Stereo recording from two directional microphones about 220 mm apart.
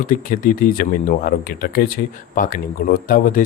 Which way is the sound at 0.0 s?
40° left (ahead or behind).